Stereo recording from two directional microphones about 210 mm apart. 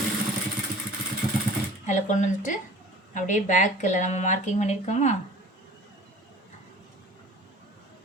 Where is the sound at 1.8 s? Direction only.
35° left (ahead or behind).